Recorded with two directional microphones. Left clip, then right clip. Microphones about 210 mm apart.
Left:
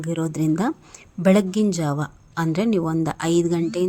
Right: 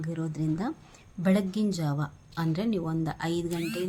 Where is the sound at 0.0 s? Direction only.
40° left (ahead or behind).